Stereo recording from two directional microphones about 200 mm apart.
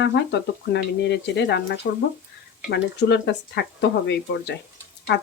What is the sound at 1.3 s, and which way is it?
Speech, 60° left (ahead or behind).